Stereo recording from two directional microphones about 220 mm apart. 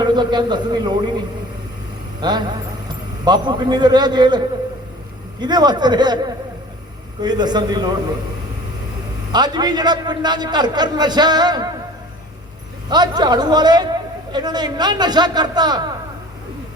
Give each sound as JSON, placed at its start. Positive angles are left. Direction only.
{"t": 0.0, "sound": "a man's voice", "side_deg": -20}
{"t": 2.2, "sound": "a man's voice", "side_deg": -20}
{"t": 9.3, "sound": "a man's voice", "side_deg": -20}
{"t": 12.9, "sound": "a man's voice", "side_deg": -20}